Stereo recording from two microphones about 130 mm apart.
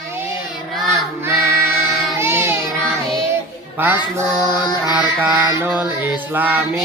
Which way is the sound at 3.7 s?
15° right (ahead or behind).